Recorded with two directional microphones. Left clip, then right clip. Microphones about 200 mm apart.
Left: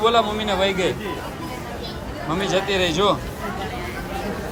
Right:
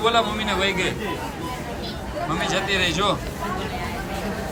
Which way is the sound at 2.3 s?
20° left (ahead or behind).